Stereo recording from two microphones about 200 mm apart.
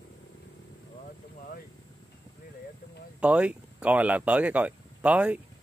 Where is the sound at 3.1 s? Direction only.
5° right (ahead or behind).